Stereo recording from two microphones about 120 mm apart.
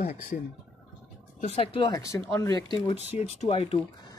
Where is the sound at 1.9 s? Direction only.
30° left (ahead or behind).